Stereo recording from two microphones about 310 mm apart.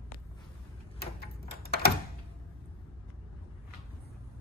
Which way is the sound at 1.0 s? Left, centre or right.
Left.